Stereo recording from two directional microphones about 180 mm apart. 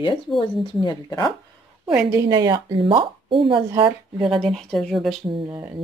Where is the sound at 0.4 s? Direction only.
20° left (ahead or behind).